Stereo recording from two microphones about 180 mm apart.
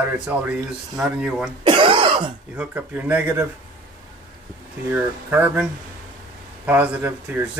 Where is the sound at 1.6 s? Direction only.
30° right (ahead or behind).